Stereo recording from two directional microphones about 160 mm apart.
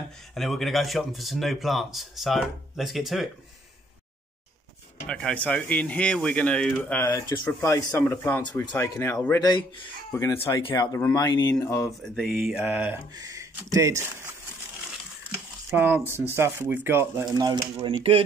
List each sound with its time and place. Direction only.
0.3 s speech: centre (ahead or behind)
5.0 s speech: 5° left (ahead or behind)
7.1 s speech: 25° left (ahead or behind)
9.4 s speech: 25° left (ahead or behind)
12.0 s speech: centre (ahead or behind); by 14.3 s 15° right (ahead or behind)
15.7 s speech: 10° right (ahead or behind)
17.7 s speech: 35° right (ahead or behind)